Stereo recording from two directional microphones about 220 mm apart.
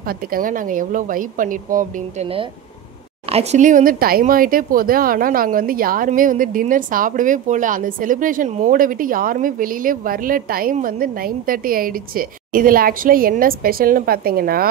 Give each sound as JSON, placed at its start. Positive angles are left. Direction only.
{"t": 0.3, "sound": "speech", "side_deg": -40}
{"t": 3.3, "sound": "speech", "side_deg": -30}